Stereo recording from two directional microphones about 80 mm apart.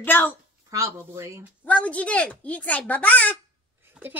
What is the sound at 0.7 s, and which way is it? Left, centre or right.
Speech, right.